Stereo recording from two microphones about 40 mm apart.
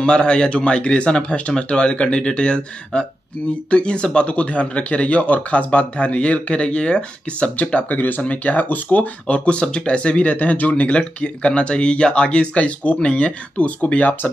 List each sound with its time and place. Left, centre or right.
0.0 s speech: left
10.3 s speech: left